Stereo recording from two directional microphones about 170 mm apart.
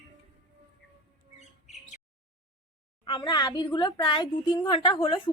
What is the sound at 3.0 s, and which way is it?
A woman's voice, 30° left (ahead or behind).